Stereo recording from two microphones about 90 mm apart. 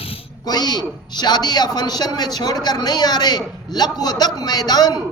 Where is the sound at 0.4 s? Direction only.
50° left (ahead or behind).